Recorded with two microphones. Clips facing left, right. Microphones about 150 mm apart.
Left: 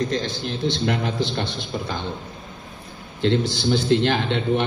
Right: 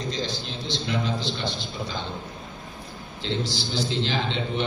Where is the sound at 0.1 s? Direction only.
55° left (ahead or behind).